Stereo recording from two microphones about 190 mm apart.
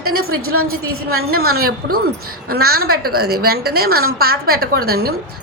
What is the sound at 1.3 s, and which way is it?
A woman's voice, 55° right (ahead or behind).